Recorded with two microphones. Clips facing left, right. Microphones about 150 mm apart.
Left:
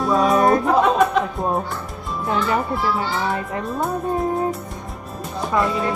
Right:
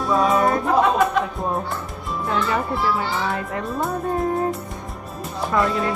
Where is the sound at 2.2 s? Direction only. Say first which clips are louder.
Left 2 dB; 20° left (ahead or behind).